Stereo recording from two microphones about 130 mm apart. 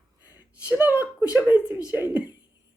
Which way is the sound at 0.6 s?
10° right (ahead or behind).